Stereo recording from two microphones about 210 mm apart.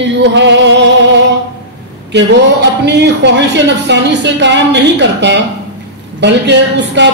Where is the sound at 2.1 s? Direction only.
55° right (ahead or behind).